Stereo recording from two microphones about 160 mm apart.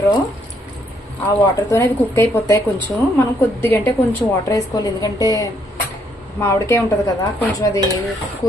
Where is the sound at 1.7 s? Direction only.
15° left (ahead or behind).